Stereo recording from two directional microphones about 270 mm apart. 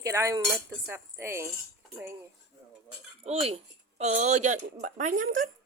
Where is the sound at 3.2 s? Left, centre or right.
Right.